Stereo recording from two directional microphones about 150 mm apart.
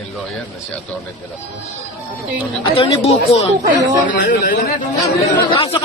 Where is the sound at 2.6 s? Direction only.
35° left (ahead or behind).